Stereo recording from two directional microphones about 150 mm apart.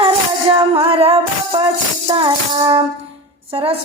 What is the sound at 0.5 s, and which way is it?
Speech, 35° right (ahead or behind).